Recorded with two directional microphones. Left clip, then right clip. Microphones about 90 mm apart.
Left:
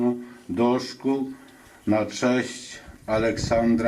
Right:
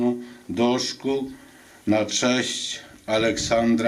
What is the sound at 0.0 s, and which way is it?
Speech, 40° right (ahead or behind).